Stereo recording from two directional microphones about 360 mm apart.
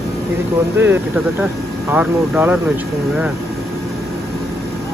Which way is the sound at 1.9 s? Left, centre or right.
Centre.